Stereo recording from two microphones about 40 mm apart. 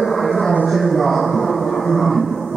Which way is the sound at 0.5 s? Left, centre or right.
Centre.